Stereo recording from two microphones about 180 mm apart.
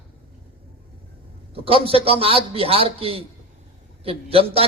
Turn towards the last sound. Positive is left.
turn(degrees=-30)  # may be behind; listen again after turning